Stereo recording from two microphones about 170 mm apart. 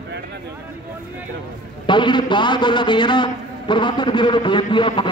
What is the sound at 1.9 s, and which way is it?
A man's voice, 25° left (ahead or behind).